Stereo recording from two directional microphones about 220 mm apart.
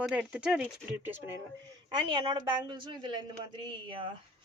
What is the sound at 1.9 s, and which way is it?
A woman's voice, 20° right (ahead or behind).